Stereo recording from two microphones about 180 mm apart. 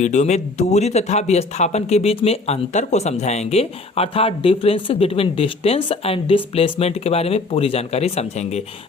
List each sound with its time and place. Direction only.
0.0 s speech: 40° left (ahead or behind)